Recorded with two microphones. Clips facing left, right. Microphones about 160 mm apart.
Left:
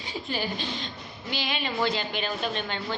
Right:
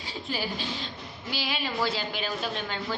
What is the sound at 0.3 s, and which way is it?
A woman's voice, 5° right (ahead or behind).